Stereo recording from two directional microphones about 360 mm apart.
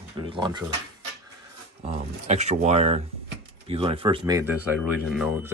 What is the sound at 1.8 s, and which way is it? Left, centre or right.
Speech, centre.